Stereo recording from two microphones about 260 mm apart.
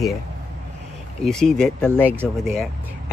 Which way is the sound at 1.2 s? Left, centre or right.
Centre.